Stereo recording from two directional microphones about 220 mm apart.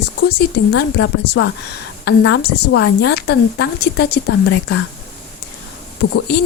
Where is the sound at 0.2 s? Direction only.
50° left (ahead or behind).